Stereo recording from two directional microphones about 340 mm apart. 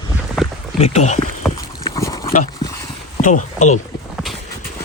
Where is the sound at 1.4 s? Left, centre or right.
Centre.